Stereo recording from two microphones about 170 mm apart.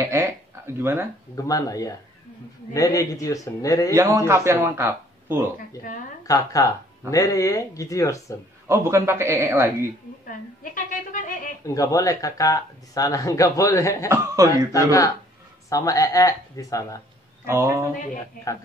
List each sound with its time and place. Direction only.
0.0 s a sound: 15° right (ahead or behind)
1.3 s speech: 20° left (ahead or behind)
3.9 s speech: 20° right (ahead or behind)
6.2 s speech: 20° left (ahead or behind)
8.6 s speech: 15° right (ahead or behind)
10.2 s a woman's voice: 50° left (ahead or behind)
11.6 s speech: 20° left (ahead or behind)
14.0 s speech: 15° right (ahead or behind)
14.7 s speech: 20° left (ahead or behind)
17.5 s speech: 15° right (ahead or behind)